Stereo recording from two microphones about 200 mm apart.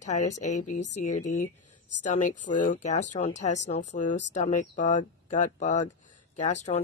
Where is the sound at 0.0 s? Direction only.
35° left (ahead or behind).